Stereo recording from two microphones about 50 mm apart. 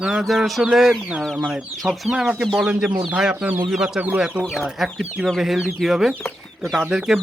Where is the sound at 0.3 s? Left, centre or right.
Centre.